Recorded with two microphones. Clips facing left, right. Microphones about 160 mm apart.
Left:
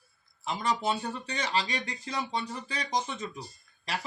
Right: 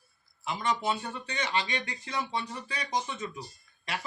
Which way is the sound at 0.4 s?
30° left (ahead or behind).